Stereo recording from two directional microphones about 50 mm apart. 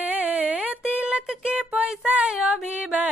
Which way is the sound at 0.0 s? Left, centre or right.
Right.